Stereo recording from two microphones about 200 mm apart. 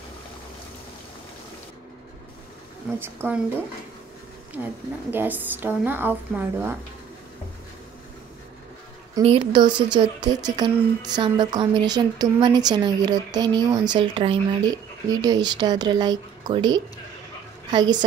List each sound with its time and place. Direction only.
3.0 s a woman's voice: 10° right (ahead or behind)
5.1 s a woman's voice: 10° right (ahead or behind)
9.2 s a woman's voice: 25° right (ahead or behind)